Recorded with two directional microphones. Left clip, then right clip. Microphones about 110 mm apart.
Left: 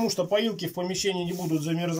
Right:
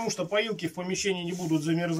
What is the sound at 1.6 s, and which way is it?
Speech, 25° left (ahead or behind).